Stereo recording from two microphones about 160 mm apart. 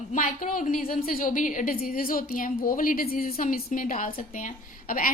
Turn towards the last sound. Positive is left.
turn(degrees=60)  # may be behind; listen again after turning